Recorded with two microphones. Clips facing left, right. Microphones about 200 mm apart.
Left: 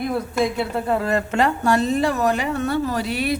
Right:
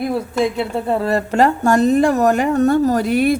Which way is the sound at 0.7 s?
30° right (ahead or behind).